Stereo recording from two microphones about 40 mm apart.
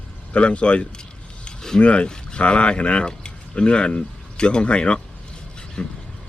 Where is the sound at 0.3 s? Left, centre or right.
Left.